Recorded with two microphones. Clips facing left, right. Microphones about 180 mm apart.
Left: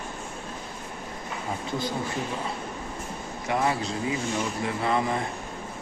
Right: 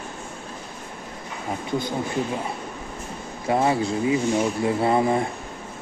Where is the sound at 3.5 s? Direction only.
25° right (ahead or behind).